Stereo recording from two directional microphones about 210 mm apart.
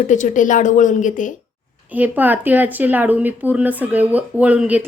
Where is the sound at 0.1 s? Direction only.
35° left (ahead or behind).